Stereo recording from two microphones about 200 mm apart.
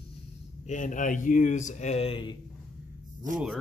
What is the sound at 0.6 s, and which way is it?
A man's voice, 40° left (ahead or behind).